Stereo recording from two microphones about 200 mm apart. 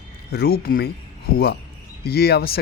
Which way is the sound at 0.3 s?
50° left (ahead or behind).